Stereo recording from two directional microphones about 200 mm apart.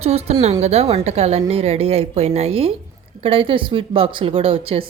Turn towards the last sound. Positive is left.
turn(degrees=-30)  # may be behind; listen again after turning